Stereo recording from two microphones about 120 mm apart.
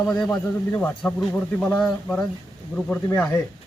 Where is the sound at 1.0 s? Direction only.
5° left (ahead or behind).